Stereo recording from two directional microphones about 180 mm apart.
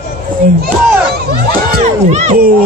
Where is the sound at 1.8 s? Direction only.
40° right (ahead or behind).